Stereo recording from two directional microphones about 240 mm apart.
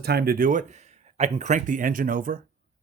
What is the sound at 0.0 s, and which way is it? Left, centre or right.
Speech, right.